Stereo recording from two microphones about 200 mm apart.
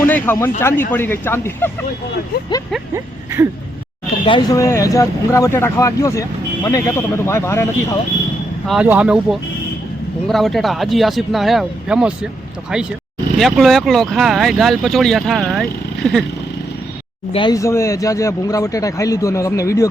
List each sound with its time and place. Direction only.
0.1 s speech: 10° left (ahead or behind)
2.9 s a sound: 15° right (ahead or behind)
4.3 s speech: 20° left (ahead or behind)
8.6 s speech: 5° right (ahead or behind)
17.3 s speech: 20° left (ahead or behind)